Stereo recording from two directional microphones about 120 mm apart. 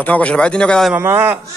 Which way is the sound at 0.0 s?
10° left (ahead or behind).